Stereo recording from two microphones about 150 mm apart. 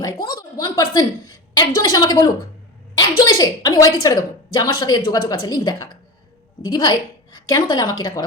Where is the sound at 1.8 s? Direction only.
25° left (ahead or behind).